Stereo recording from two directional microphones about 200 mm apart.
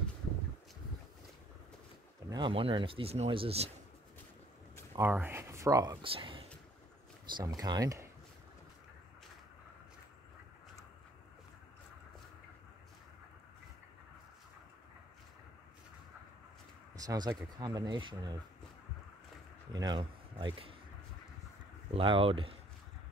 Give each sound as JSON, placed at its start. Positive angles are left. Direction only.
{"t": 2.2, "sound": "speech", "side_deg": -20}
{"t": 4.9, "sound": "speech", "side_deg": -10}
{"t": 16.9, "sound": "speech", "side_deg": -20}
{"t": 19.7, "sound": "speech", "side_deg": -20}
{"t": 21.9, "sound": "speech", "side_deg": -25}